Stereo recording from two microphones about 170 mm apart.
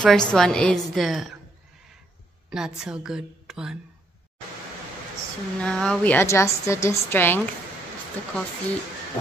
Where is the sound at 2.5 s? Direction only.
5° right (ahead or behind).